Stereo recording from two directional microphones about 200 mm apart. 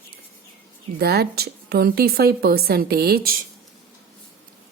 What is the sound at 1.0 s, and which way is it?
A woman's voice, 50° right (ahead or behind).